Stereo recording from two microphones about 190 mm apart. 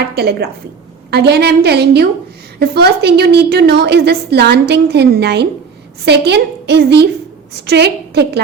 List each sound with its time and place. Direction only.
0.2 s a woman's voice: 60° right (ahead or behind)